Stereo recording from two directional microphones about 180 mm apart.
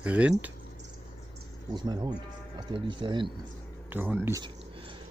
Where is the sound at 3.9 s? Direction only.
10° right (ahead or behind).